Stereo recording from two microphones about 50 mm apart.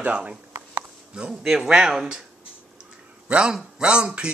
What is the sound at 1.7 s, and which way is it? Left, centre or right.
Speech, centre.